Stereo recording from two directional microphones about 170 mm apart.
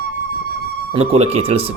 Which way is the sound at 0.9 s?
35° right (ahead or behind).